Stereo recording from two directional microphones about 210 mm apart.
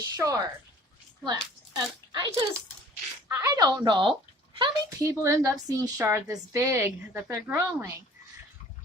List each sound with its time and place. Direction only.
0.0 s a child's voice: 15° right (ahead or behind)